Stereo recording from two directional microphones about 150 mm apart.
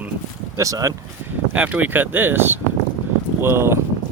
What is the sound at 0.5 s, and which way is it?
Speech, 20° right (ahead or behind).